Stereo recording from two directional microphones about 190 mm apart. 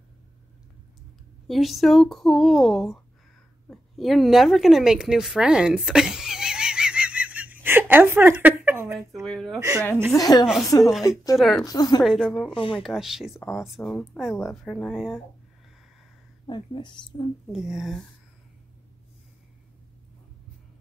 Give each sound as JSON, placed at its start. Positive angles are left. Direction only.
{"t": 1.5, "sound": "speech", "side_deg": 0}
{"t": 3.6, "sound": "a sound", "side_deg": 0}
{"t": 9.2, "sound": "speech", "side_deg": 0}
{"t": 9.6, "sound": "speech", "side_deg": -20}
{"t": 10.1, "sound": "speech", "side_deg": 20}
{"t": 10.4, "sound": "speech", "side_deg": -5}
{"t": 11.0, "sound": "a woman's voice", "side_deg": 20}
{"t": 11.3, "sound": "speech", "side_deg": 0}
{"t": 11.6, "sound": "speech", "side_deg": 20}
{"t": 12.0, "sound": "speech", "side_deg": 0}
{"t": 12.5, "sound": "speech", "side_deg": 30}
{"t": 12.8, "sound": "speech", "side_deg": 0}
{"t": 16.4, "sound": "speech", "side_deg": 25}
{"t": 17.5, "sound": "speech", "side_deg": -5}